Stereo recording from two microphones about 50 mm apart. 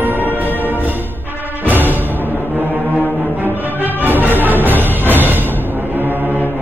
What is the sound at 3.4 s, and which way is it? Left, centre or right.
Music, right.